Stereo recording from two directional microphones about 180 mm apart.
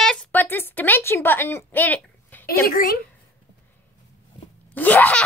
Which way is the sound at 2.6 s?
55° left (ahead or behind).